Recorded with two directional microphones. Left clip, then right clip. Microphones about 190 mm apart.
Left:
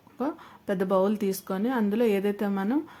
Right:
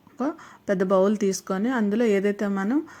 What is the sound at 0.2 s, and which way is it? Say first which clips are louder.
Speech: right 3 dB; 15° right (ahead or behind).